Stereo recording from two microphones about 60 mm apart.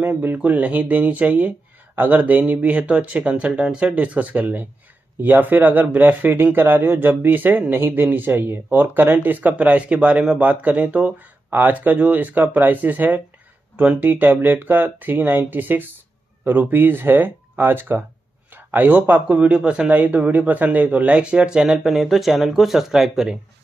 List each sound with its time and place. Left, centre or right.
0.0 s speech: right; by 23.2 s centre